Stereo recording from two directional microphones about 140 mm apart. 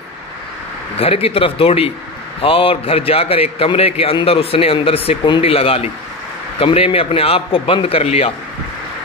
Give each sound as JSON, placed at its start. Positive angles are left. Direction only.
{"t": 0.9, "sound": "a man's voice", "side_deg": 45}